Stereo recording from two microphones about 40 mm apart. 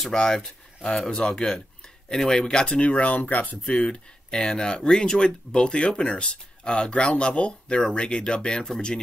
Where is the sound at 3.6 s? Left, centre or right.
Left.